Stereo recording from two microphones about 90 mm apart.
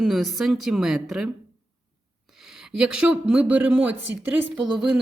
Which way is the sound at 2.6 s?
5° right (ahead or behind).